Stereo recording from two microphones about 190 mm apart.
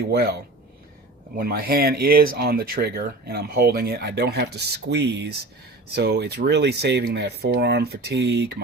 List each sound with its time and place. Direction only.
0.0 s speech: 60° right (ahead or behind)